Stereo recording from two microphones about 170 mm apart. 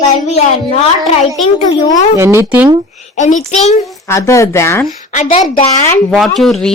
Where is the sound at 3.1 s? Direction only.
45° left (ahead or behind).